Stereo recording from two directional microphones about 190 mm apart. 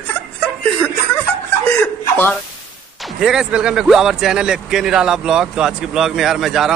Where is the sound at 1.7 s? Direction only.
10° left (ahead or behind).